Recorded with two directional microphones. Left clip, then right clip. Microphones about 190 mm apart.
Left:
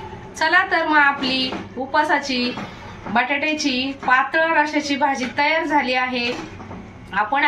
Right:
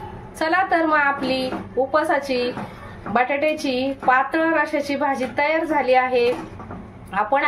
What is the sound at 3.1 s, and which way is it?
A woman's voice, 60° right (ahead or behind).